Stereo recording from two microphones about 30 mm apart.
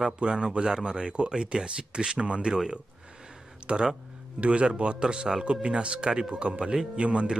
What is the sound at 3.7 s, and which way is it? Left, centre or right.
Speech, right.